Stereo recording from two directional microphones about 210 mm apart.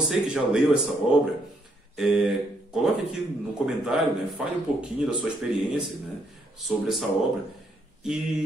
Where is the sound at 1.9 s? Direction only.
Centre (ahead or behind).